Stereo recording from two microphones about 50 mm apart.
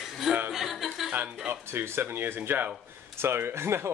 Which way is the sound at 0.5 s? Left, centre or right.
Centre.